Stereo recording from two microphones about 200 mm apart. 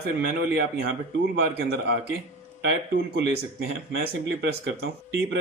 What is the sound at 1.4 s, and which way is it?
Speech, 55° right (ahead or behind).